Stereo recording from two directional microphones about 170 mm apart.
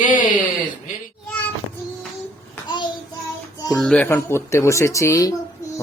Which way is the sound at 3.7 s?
5° left (ahead or behind).